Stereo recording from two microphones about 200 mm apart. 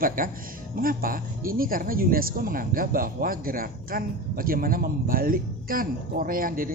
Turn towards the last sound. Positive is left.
turn(degrees=-45)  # may be behind; listen again after turning